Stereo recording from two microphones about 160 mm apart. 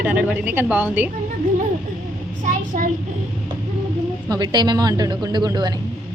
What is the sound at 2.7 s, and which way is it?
Speech, 50° right (ahead or behind).